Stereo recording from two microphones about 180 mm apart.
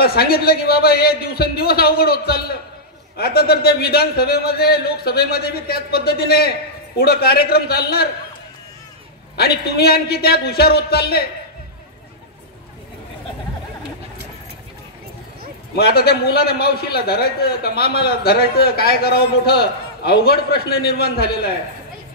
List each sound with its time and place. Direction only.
0.0 s a man's voice: 60° left (ahead or behind)
9.4 s a man's voice: 60° left (ahead or behind)
15.7 s a man's voice: 60° left (ahead or behind)